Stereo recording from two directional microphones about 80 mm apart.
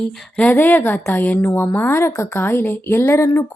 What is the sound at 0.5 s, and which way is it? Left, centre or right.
A woman's voice, left.